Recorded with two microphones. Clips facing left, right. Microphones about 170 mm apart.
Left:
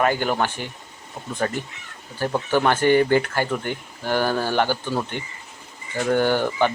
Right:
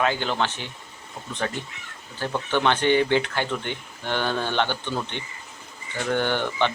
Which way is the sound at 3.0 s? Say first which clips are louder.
Left 3 dB; 45° left (ahead or behind).